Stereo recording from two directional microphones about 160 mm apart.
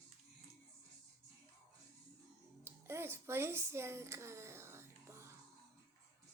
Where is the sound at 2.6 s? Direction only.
15° right (ahead or behind).